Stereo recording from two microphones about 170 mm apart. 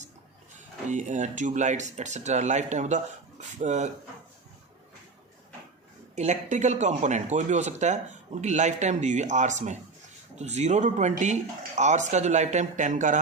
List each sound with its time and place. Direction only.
0.9 s speech: 45° right (ahead or behind)
6.1 s speech: 45° right (ahead or behind)